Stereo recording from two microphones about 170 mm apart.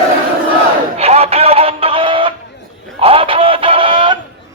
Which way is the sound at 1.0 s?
35° right (ahead or behind).